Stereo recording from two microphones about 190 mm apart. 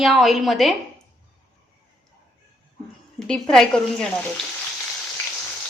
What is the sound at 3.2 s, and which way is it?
Speech, 5° left (ahead or behind).